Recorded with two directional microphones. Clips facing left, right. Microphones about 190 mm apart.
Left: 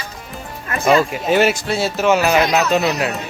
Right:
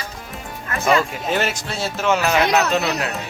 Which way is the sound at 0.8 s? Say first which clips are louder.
Left 4 dB; 10° left (ahead or behind).